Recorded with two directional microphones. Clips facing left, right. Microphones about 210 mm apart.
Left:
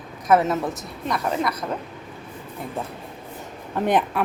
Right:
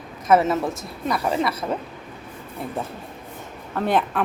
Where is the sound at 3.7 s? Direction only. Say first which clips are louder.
Left 1 dB; 15° left (ahead or behind).